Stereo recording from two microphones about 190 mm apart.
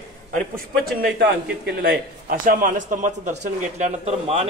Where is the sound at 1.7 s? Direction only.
60° right (ahead or behind).